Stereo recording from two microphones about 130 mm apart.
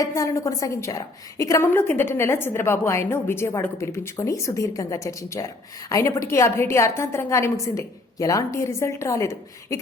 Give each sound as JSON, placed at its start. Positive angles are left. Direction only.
{"t": 0.0, "sound": "a woman's voice", "side_deg": 25}